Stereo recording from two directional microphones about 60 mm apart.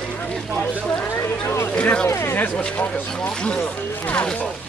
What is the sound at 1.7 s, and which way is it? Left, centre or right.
Speech, left.